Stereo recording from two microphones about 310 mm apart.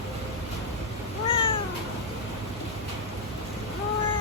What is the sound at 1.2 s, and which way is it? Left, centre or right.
Cat, centre.